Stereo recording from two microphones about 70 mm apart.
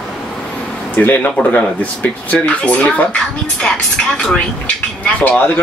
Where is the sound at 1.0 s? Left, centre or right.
Left.